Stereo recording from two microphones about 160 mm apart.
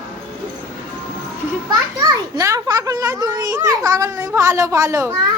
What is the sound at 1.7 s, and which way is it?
Children playing, 20° right (ahead or behind).